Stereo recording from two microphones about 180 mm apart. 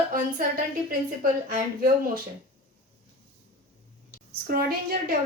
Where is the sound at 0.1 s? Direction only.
55° right (ahead or behind).